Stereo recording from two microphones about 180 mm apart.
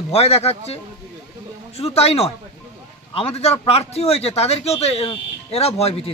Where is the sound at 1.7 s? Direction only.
35° left (ahead or behind).